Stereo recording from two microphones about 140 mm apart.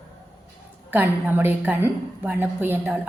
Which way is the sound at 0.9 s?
15° right (ahead or behind).